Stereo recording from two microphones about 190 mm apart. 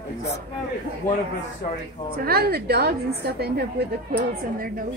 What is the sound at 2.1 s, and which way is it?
A woman's voice, 55° right (ahead or behind).